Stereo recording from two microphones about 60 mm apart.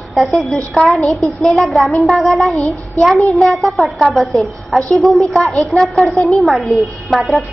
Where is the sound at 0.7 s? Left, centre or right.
Centre.